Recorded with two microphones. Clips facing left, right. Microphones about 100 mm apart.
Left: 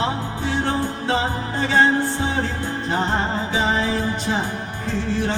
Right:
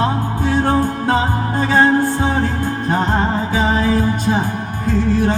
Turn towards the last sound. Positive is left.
turn(degrees=-45)  # may be behind; listen again after turning